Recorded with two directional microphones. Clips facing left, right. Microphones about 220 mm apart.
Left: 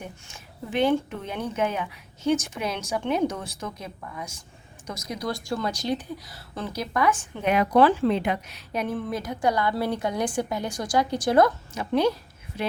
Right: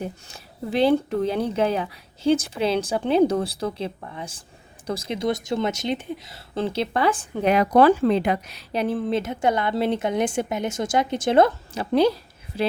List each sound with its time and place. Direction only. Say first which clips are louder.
0.0 s a woman's voice: right 8 dB; 35° right (ahead or behind)